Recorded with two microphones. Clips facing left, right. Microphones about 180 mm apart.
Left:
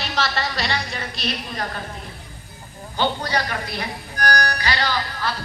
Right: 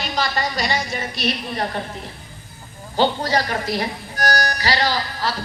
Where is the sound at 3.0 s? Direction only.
35° right (ahead or behind).